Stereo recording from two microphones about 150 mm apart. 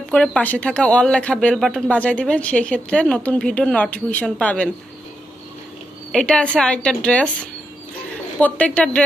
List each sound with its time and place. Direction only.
0.1 s speech: 5° left (ahead or behind)
6.1 s speech: 5° left (ahead or behind)
8.4 s speech: 10° left (ahead or behind)